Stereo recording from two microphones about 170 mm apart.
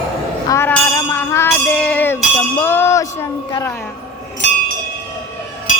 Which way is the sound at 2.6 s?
15° left (ahead or behind).